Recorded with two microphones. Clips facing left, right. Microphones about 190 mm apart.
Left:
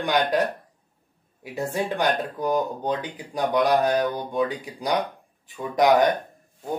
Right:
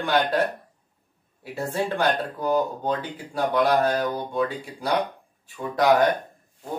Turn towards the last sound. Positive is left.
turn(degrees=20)  # may be behind; listen again after turning